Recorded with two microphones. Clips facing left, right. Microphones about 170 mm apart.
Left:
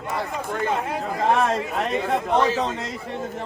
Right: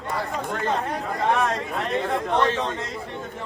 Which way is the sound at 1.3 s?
30° left (ahead or behind).